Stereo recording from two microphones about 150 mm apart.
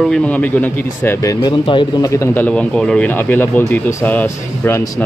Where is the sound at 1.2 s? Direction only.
30° left (ahead or behind).